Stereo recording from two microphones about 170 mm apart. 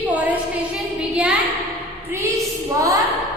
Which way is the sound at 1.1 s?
5° right (ahead or behind).